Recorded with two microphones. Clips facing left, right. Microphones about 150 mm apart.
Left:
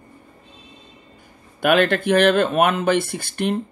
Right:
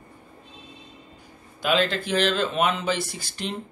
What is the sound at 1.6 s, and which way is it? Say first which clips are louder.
Speech: left 6 dB; 60° left (ahead or behind).